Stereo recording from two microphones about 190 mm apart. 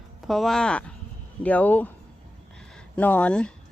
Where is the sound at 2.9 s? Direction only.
5° left (ahead or behind).